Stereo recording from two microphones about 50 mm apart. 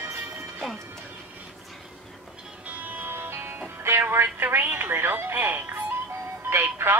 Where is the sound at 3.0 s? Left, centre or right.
Right.